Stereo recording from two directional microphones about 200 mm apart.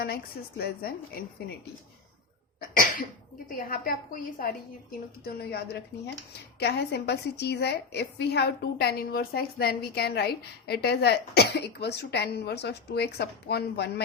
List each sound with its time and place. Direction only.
0.0 s a woman's voice: 50° left (ahead or behind)
2.6 s cough: 45° left (ahead or behind)
3.6 s a woman's voice: 45° left (ahead or behind)